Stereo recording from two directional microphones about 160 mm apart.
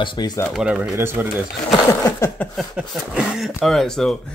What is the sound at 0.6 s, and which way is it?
Speech, 5° right (ahead or behind).